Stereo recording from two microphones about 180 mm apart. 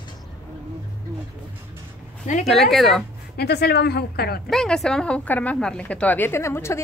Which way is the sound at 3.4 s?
65° left (ahead or behind).